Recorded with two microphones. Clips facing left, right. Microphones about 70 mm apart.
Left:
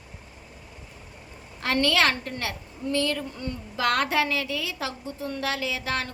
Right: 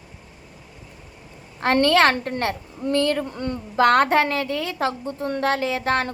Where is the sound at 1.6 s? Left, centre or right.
Right.